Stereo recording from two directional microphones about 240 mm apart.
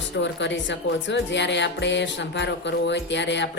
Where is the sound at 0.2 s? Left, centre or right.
Left.